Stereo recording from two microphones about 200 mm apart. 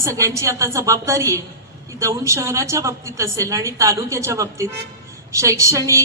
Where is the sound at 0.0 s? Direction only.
15° right (ahead or behind).